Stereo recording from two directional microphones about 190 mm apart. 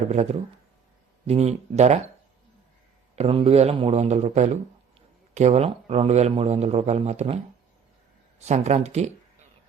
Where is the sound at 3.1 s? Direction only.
30° right (ahead or behind).